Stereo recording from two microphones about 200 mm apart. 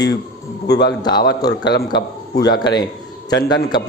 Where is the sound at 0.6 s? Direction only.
55° left (ahead or behind).